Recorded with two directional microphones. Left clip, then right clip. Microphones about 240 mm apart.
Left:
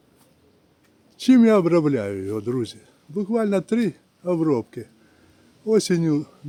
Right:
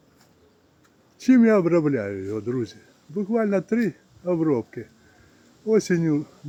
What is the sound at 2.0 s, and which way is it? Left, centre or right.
Speech, centre.